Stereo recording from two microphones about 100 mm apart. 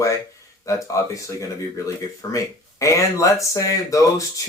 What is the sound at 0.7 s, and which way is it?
Speech, 35° left (ahead or behind).